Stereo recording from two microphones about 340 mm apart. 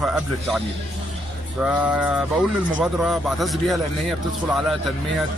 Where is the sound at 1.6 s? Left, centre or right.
Centre.